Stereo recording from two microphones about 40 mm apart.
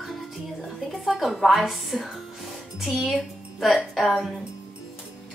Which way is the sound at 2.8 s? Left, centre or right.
Centre.